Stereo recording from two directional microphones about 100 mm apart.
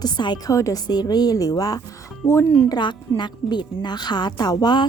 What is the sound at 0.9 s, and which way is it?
Speech, 45° left (ahead or behind).